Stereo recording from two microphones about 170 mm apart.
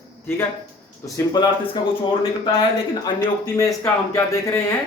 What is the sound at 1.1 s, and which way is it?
Speech, 20° left (ahead or behind).